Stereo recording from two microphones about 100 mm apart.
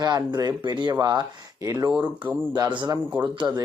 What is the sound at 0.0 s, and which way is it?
Speech, 45° right (ahead or behind).